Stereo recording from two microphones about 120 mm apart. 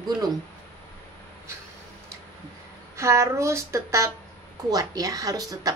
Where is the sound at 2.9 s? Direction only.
25° right (ahead or behind).